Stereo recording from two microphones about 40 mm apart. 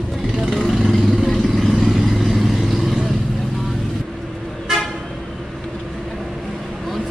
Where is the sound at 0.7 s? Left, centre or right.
Centre.